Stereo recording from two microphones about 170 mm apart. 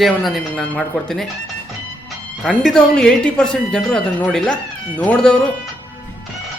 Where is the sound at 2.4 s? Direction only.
5° left (ahead or behind).